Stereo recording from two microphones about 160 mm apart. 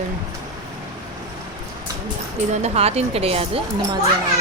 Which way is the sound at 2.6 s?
40° right (ahead or behind).